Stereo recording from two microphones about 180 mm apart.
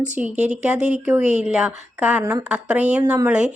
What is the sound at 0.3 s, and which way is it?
Speech, 40° right (ahead or behind).